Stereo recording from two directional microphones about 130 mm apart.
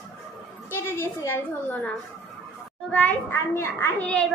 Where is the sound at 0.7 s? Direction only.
20° left (ahead or behind).